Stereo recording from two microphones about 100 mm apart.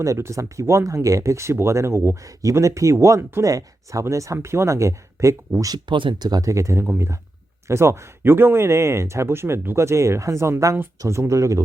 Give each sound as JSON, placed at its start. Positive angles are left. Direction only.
{"t": 0.0, "sound": "speech", "side_deg": -30}
{"t": 5.7, "sound": "speech", "side_deg": -55}